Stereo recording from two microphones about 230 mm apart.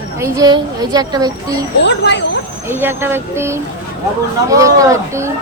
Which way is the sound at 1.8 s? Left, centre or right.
Left.